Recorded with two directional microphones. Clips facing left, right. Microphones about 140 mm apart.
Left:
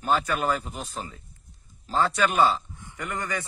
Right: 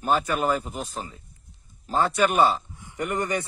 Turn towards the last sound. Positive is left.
turn(degrees=-20)  # may be behind; listen again after turning